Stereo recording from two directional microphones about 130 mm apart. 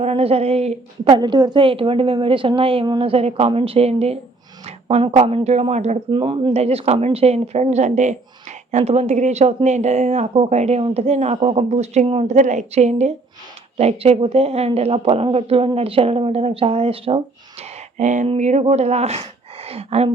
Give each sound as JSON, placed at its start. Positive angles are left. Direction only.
{"t": 0.0, "sound": "speech", "side_deg": -50}
{"t": 1.1, "sound": "a woman's voice", "side_deg": -35}
{"t": 6.1, "sound": "a woman's voice", "side_deg": -40}
{"t": 6.5, "sound": "speech", "side_deg": -50}